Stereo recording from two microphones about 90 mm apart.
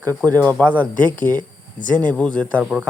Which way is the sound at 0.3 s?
20° left (ahead or behind).